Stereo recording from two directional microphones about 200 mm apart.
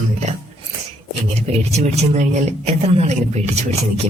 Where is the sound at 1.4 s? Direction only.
35° right (ahead or behind).